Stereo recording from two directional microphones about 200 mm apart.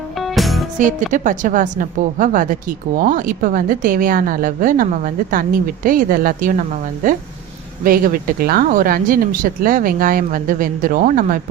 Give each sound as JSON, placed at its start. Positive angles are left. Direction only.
{"t": 0.2, "sound": "music", "side_deg": 0}
{"t": 0.8, "sound": "a woman's voice", "side_deg": -40}